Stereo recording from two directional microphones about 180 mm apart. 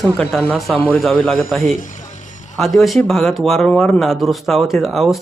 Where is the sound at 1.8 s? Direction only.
45° left (ahead or behind).